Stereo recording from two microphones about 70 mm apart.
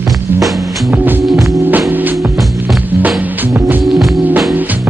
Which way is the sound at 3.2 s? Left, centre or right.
Right.